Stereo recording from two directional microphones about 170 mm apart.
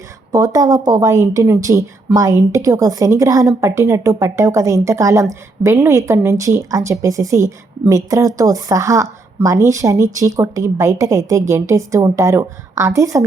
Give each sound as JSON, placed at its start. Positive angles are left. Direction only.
{"t": 0.3, "sound": "a woman's voice", "side_deg": -20}